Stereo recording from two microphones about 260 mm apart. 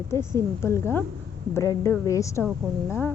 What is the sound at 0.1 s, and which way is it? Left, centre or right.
A woman's voice, centre.